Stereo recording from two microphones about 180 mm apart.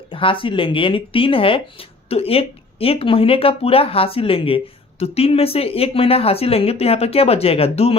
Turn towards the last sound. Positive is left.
turn(degrees=35)  # may be behind; listen again after turning